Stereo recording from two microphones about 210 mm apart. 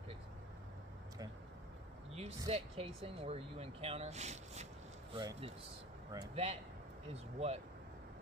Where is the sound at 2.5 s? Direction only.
30° right (ahead or behind).